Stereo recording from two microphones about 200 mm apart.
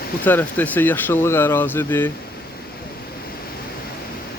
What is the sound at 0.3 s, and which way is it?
Speech, 10° left (ahead or behind).